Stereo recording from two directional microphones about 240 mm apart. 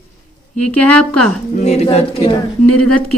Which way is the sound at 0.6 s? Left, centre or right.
Centre.